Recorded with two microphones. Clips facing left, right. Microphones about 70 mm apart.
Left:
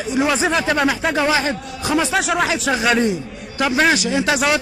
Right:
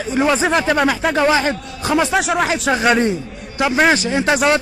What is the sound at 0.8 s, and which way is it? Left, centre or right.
Speech, right.